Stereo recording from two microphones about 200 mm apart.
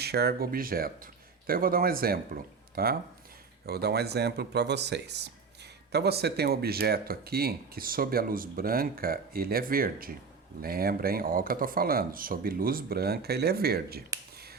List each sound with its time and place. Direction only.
0.0 s speech: 55° right (ahead or behind)